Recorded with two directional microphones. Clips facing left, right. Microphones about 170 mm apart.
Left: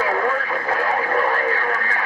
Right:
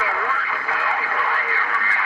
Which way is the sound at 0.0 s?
40° left (ahead or behind).